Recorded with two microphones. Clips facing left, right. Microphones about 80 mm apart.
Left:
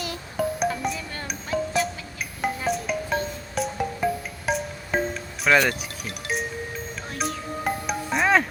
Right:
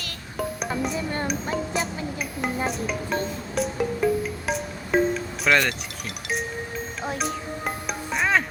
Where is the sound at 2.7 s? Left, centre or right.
Centre.